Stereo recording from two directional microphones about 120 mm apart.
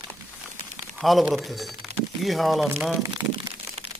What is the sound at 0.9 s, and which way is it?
Speech, centre (ahead or behind).